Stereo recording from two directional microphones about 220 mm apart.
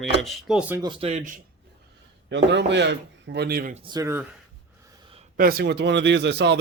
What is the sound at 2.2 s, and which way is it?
Speech, 55° right (ahead or behind).